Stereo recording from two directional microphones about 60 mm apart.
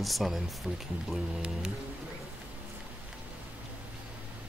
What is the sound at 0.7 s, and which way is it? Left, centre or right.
Speech, right.